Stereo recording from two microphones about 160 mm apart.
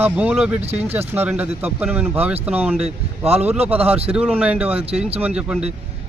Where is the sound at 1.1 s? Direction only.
10° right (ahead or behind).